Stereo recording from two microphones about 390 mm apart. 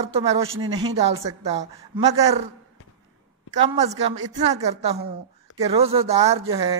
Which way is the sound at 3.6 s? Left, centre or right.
Centre.